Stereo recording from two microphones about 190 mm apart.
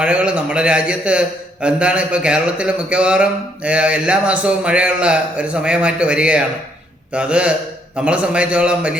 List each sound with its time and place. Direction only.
0.0 s a man's voice: 5° right (ahead or behind)